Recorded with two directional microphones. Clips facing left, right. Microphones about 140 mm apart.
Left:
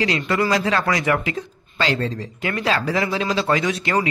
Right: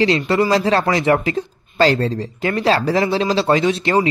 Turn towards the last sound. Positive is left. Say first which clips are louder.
# right 5 dB
turn(degrees=-30)  # may be behind; listen again after turning